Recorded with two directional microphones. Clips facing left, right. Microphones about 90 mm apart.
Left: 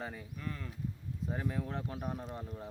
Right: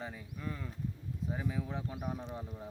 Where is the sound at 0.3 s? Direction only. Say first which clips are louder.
Right 3 dB; 15° right (ahead or behind).